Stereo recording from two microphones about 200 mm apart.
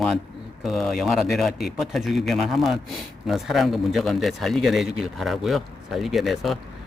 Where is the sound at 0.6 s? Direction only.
Centre (ahead or behind).